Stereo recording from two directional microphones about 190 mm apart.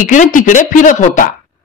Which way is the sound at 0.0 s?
45° left (ahead or behind).